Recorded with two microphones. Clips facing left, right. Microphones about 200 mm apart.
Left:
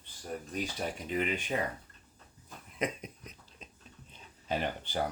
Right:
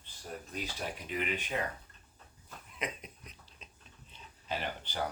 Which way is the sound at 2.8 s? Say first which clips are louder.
Left 6 dB; 45° left (ahead or behind).